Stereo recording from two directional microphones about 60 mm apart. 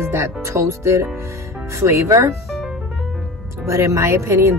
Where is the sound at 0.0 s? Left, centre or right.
Right.